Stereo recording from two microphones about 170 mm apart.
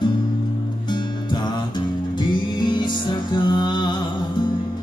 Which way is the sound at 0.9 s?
25° left (ahead or behind).